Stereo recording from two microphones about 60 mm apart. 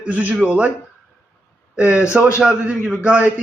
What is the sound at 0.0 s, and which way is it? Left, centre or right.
Speech, right.